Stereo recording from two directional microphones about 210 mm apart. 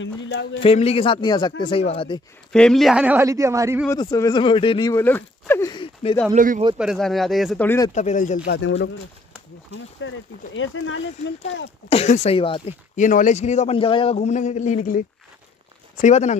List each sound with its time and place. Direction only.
0.0 s speech: 60° left (ahead or behind)
0.6 s speech: 30° left (ahead or behind)
2.5 s speech: centre (ahead or behind); by 3.8 s 15° right (ahead or behind)
3.9 s speech: 15° left (ahead or behind)
4.9 s speech: 10° left (ahead or behind)
6.3 s speech: 40° right (ahead or behind)
6.8 s speech: centre (ahead or behind)
7.6 s speech: 15° left (ahead or behind)
7.9 s a man's voice: 35° left (ahead or behind)
8.5 s speech: 60° left (ahead or behind)
10.0 s speech: 65° left (ahead or behind)
11.9 s speech: 30° left (ahead or behind)
12.9 s a man's voice: 35° left (ahead or behind)